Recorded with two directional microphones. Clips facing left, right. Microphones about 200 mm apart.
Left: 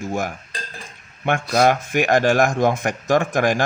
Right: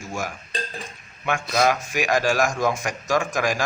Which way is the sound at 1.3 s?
55° left (ahead or behind).